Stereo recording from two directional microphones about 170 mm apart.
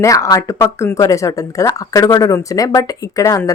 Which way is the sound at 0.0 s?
20° left (ahead or behind).